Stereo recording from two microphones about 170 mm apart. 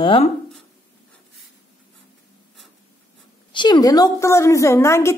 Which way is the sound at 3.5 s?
25° left (ahead or behind).